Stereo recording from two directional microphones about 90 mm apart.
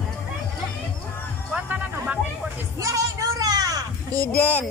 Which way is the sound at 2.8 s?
40° right (ahead or behind).